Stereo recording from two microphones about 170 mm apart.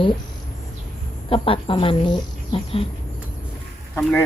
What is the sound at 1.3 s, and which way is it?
Speech, 30° left (ahead or behind).